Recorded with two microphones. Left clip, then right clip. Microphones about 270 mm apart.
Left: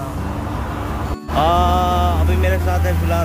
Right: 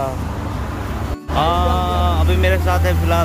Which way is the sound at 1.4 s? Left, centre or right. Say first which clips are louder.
Left 2 dB; centre.